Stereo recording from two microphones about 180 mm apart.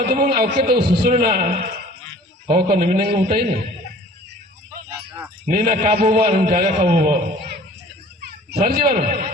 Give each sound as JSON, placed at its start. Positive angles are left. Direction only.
{"t": 0.1, "sound": "a man's voice", "side_deg": -55}
{"t": 5.5, "sound": "a man's voice", "side_deg": -55}
{"t": 5.7, "sound": "a man's voice", "side_deg": -35}
{"t": 6.1, "sound": "a man's voice", "side_deg": -60}
{"t": 6.3, "sound": "a man's voice", "side_deg": -45}
{"t": 7.3, "sound": "a sound", "side_deg": -65}
{"t": 8.2, "sound": "speech", "side_deg": -60}